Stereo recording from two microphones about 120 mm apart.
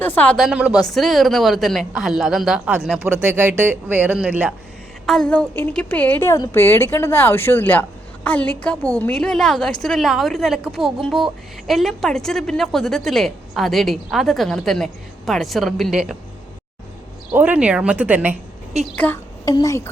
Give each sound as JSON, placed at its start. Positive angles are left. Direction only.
{"t": 0.0, "sound": "a woman's voice", "side_deg": 15}
{"t": 0.3, "sound": "a woman's voice", "side_deg": -5}
{"t": 3.3, "sound": "speech", "side_deg": -20}
{"t": 5.0, "sound": "a woman's voice", "side_deg": 5}
{"t": 17.3, "sound": "speech", "side_deg": -10}
{"t": 18.9, "sound": "a woman's voice", "side_deg": 15}
{"t": 19.5, "sound": "speech", "side_deg": 30}